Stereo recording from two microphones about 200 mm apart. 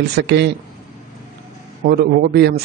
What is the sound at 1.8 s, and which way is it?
Speech, 50° right (ahead or behind).